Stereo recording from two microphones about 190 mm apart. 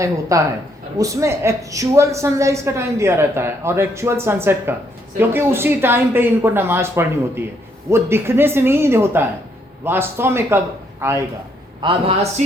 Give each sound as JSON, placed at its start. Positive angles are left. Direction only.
{"t": 0.0, "sound": "a woman's voice", "side_deg": -15}
{"t": 11.8, "sound": "a man's voice", "side_deg": -30}